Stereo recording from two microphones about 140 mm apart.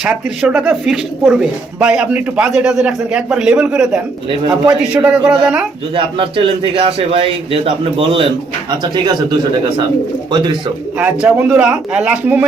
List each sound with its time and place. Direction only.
0.0 s speech: 5° right (ahead or behind)
5.9 s a man's voice: 40° right (ahead or behind)
10.9 s speech: 10° right (ahead or behind)